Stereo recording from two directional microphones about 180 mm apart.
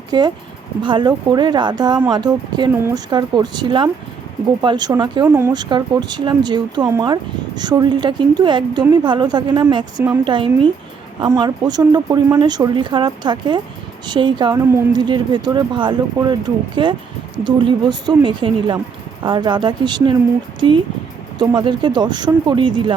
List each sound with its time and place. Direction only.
0.1 s speech: 25° right (ahead or behind)
5.2 s speech: 10° right (ahead or behind)
5.5 s speech: 25° right (ahead or behind)